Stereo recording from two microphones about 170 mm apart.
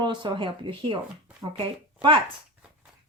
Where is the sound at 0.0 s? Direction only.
25° right (ahead or behind).